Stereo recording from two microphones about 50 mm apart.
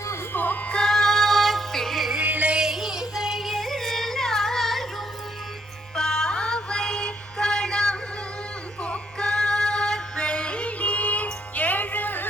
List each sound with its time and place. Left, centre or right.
0.3 s music: left
0.7 s music: centre
2.2 s music: right
2.6 s yodeling: centre
6.0 s music: centre
8.8 s female singing: centre; by 12.3 s left